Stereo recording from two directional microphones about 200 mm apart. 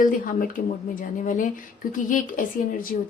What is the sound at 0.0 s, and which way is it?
Speech, 45° left (ahead or behind).